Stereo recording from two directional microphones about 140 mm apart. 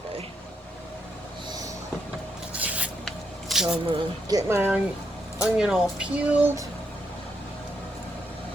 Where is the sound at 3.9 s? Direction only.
25° right (ahead or behind).